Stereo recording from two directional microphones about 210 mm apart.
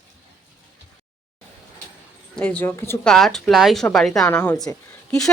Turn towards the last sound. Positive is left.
turn(degrees=5)  # may be behind; listen again after turning